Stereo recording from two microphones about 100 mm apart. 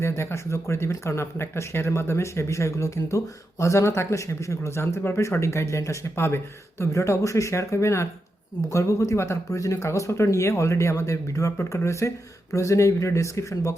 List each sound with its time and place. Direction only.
0.0 s speech: 25° left (ahead or behind)